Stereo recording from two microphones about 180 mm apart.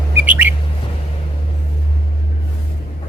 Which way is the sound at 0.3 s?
10° right (ahead or behind).